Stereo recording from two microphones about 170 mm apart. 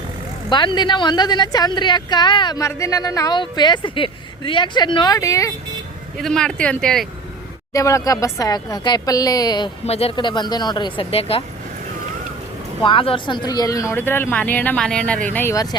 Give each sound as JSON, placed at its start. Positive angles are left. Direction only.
{"t": 0.5, "sound": "a woman's voice", "side_deg": 25}
{"t": 6.1, "sound": "speech", "side_deg": 5}
{"t": 7.7, "sound": "a woman's voice", "side_deg": 20}
{"t": 9.8, "sound": "a woman's voice", "side_deg": 35}
{"t": 12.8, "sound": "speech", "side_deg": 30}